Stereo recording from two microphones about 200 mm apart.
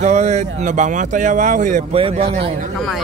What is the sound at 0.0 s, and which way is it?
Speech, 35° right (ahead or behind).